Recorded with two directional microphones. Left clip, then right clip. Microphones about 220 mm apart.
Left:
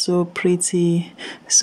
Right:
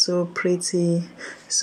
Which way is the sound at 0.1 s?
20° left (ahead or behind).